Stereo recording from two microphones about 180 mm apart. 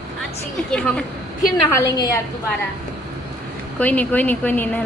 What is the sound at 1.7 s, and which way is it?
Speech, 15° left (ahead or behind).